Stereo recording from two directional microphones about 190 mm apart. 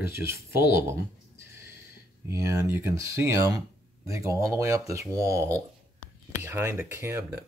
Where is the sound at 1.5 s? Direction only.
15° right (ahead or behind).